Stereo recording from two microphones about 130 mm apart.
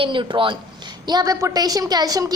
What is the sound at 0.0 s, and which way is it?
A woman's voice, 40° right (ahead or behind).